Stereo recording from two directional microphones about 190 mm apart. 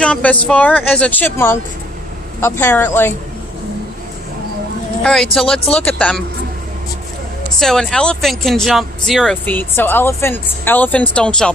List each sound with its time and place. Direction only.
0.0 s speech: 5° left (ahead or behind)
5.0 s speech: centre (ahead or behind)
7.6 s speech: centre (ahead or behind)